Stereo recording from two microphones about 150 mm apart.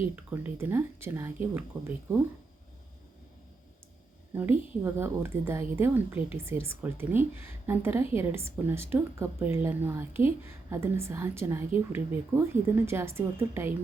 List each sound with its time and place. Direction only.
0.3 s a woman's voice: 15° right (ahead or behind)
4.4 s a woman's voice: 15° right (ahead or behind)